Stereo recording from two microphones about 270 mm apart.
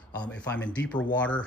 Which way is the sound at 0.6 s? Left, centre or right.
Centre.